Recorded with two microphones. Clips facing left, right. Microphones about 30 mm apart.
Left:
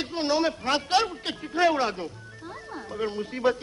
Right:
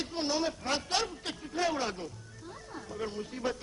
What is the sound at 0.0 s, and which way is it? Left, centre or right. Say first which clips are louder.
A man's voice: left 7 dB; left.